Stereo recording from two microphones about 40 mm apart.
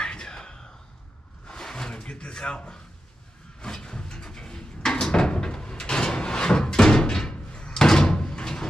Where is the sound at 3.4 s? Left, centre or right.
Centre.